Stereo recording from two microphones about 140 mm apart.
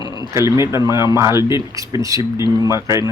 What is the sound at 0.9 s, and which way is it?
A man's voice, 20° right (ahead or behind).